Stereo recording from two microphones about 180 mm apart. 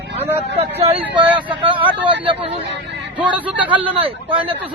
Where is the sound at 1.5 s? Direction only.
25° right (ahead or behind).